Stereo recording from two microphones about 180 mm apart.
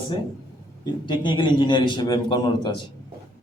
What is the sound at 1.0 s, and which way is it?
A man's voice, 25° left (ahead or behind).